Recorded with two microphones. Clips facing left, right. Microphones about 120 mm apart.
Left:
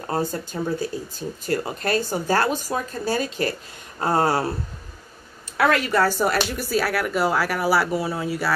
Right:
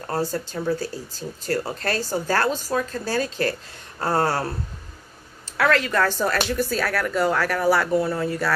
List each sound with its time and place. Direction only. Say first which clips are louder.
0.0 s speech: even; 15° left (ahead or behind)
5.6 s speech: left 1 dB; 15° left (ahead or behind)